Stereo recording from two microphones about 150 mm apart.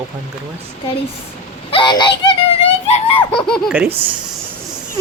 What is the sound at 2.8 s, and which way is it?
Giggle, 45° left (ahead or behind).